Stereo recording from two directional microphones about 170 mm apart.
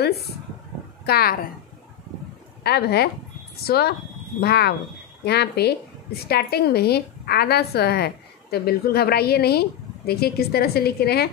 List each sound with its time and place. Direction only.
1.0 s speech: 65° left (ahead or behind)
2.6 s a woman's voice: 70° left (ahead or behind)